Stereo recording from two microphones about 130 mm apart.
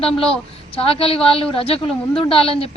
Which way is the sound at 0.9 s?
45° left (ahead or behind).